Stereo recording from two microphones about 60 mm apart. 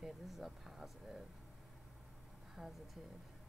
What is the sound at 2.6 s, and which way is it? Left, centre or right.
Speech, centre.